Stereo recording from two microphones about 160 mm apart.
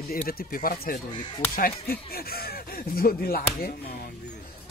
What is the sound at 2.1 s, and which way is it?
Speech, 70° left (ahead or behind).